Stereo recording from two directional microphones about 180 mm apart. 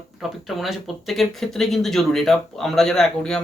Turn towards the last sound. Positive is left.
turn(degrees=5)  # may be behind; listen again after turning